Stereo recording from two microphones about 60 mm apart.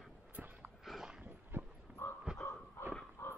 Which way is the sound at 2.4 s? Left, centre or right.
Left.